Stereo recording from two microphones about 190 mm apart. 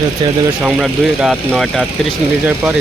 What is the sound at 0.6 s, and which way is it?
Speech, 5° right (ahead or behind).